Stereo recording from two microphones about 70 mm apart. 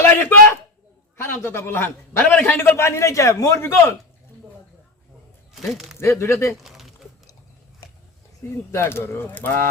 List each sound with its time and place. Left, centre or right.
0.0 s a man's voice: left
2.2 s a man's voice: centre
2.6 s a man's voice: left
5.5 s speech: centre
6.0 s a man's voice: left
6.6 s a sound: centre
8.4 s a man's voice: left